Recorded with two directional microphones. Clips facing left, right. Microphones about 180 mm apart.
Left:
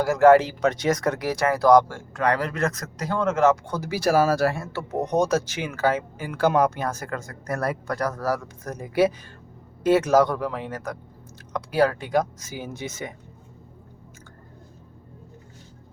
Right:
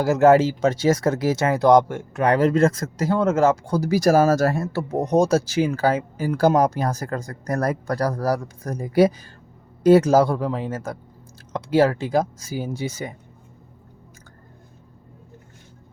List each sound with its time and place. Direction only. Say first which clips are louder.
0.0 s speech: right 1 dB; 25° right (ahead or behind)